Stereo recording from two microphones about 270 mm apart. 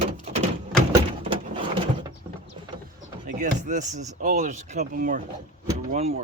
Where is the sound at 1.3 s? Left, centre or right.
Centre.